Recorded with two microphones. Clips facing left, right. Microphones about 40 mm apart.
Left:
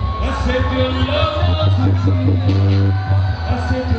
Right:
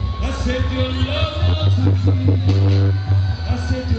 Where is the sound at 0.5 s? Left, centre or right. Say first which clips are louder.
Left 4 dB; centre.